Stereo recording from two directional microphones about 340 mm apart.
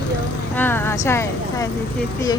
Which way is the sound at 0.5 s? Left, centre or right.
Centre.